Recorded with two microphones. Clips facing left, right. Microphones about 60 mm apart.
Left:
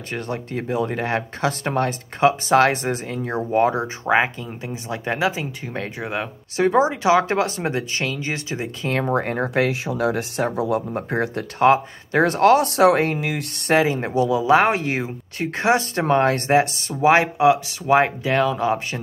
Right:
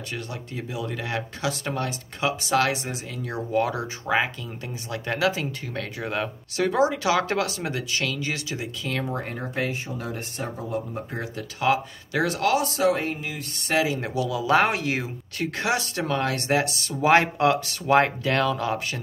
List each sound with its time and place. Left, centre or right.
0.1 s speech: left
9.1 s speech: left
9.5 s speech: left
10.9 s speech: left
11.6 s speech: left
13.7 s speech: left
16.9 s speech: centre